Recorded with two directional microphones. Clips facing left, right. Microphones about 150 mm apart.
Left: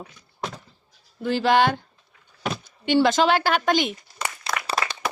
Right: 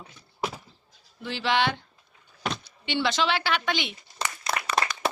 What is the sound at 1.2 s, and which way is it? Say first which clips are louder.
Speech: left 6 dB; 45° left (ahead or behind).